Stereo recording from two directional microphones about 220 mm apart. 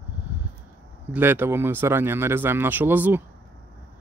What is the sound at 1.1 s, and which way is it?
Speech, 10° right (ahead or behind).